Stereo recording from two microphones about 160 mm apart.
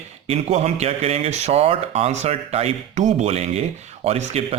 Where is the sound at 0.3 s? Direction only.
40° right (ahead or behind).